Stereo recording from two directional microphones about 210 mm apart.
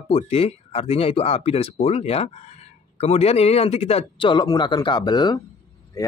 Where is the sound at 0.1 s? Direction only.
30° left (ahead or behind).